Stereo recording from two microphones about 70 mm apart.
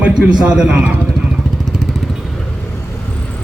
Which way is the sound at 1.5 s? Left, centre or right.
Centre.